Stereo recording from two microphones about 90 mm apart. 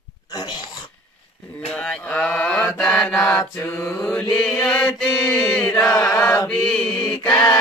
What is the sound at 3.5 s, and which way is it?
Mantra, 30° left (ahead or behind).